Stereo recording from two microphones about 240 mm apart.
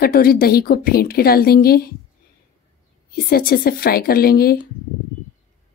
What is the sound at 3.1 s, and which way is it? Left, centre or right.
A woman's voice, left.